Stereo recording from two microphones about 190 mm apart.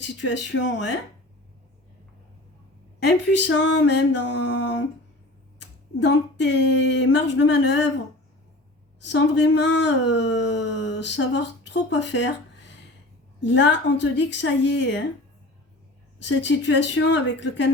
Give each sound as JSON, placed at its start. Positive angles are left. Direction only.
{"t": 0.2, "sound": "speech", "side_deg": 75}
{"t": 3.3, "sound": "speech", "side_deg": 70}
{"t": 9.0, "sound": "speech", "side_deg": 70}
{"t": 16.1, "sound": "speech", "side_deg": 70}